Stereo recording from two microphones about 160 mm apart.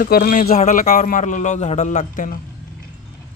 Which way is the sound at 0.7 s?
55° left (ahead or behind).